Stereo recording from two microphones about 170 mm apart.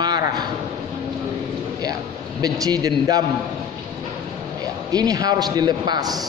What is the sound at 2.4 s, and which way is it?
Speech, 20° right (ahead or behind).